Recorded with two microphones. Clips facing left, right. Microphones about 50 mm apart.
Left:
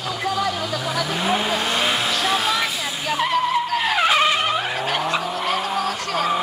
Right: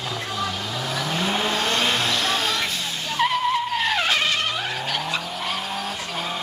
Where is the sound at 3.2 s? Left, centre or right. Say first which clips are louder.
Even; centre.